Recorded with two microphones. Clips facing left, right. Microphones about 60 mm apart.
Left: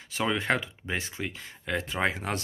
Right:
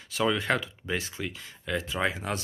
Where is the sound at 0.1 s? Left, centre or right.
Left.